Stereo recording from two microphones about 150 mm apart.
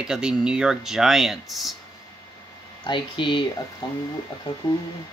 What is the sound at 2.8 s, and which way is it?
Speech, 35° left (ahead or behind).